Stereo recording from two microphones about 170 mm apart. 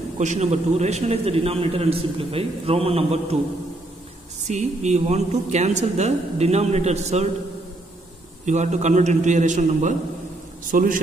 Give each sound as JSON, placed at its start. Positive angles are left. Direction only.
{"t": 0.2, "sound": "a man's voice", "side_deg": -45}
{"t": 4.5, "sound": "a man's voice", "side_deg": -45}
{"t": 8.5, "sound": "a man's voice", "side_deg": -45}